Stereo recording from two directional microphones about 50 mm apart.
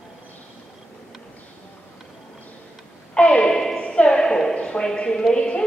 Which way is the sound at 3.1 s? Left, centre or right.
Centre.